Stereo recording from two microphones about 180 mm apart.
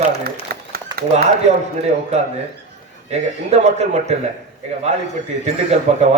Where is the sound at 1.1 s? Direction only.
40° right (ahead or behind).